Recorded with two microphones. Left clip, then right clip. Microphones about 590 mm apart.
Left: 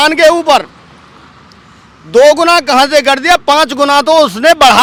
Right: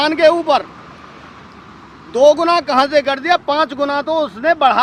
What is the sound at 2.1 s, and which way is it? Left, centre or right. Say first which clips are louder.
A man's voice: left 5 dB; left.